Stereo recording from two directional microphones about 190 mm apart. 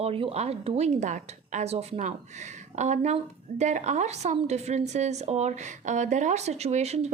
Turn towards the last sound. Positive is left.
turn(degrees=-35)  # may be behind; listen again after turning